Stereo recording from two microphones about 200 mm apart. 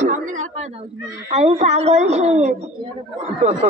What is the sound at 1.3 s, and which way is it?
A woman's voice, 35° right (ahead or behind).